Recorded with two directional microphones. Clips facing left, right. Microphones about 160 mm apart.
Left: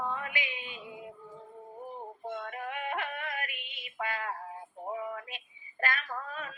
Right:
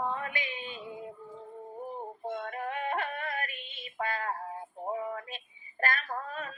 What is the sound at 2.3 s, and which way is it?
Music, 40° right (ahead or behind).